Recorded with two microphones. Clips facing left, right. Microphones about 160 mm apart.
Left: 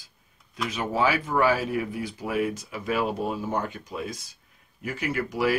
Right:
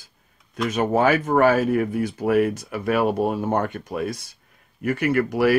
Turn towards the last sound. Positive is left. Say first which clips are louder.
# right 7 dB
turn(degrees=-60)  # may be behind; listen again after turning